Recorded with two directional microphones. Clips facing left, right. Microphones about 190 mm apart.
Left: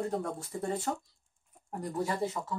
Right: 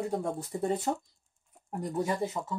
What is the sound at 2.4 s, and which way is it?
Speech, 20° right (ahead or behind).